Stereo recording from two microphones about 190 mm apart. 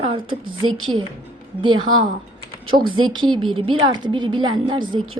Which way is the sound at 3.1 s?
25° right (ahead or behind).